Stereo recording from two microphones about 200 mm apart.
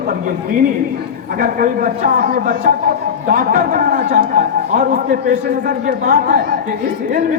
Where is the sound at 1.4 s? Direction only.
45° right (ahead or behind).